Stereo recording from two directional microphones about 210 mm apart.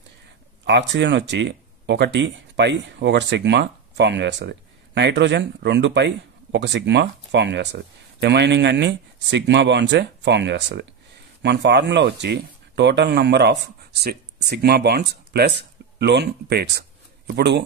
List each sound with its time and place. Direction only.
0.7 s speech: 55° right (ahead or behind)